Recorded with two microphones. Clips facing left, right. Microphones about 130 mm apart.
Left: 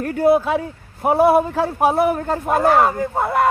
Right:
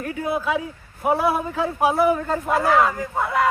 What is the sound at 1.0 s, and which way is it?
Speech, 25° left (ahead or behind).